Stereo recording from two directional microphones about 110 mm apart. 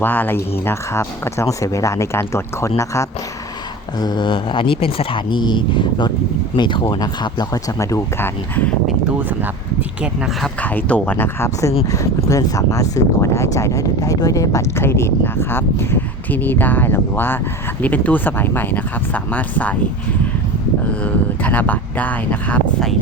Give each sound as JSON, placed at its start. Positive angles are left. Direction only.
{"t": 0.0, "sound": "speech", "side_deg": 20}
{"t": 3.9, "sound": "speech", "side_deg": 40}
{"t": 8.9, "sound": "speech", "side_deg": -10}
{"t": 10.6, "sound": "speech", "side_deg": 15}
{"t": 20.9, "sound": "speech", "side_deg": 15}